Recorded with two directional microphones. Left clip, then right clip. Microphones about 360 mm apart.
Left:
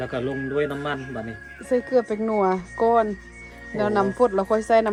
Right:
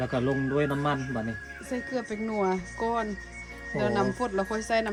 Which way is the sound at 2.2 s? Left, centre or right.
Left.